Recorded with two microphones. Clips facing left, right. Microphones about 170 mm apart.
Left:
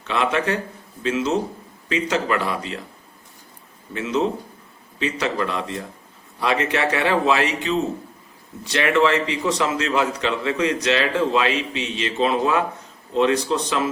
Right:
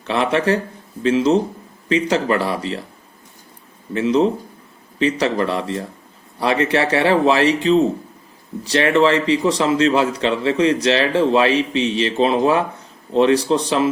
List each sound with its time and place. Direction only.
0.0 s a man's voice: 30° right (ahead or behind)
3.9 s a man's voice: 30° right (ahead or behind)